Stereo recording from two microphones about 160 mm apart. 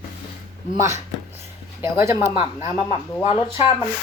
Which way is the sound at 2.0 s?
20° right (ahead or behind).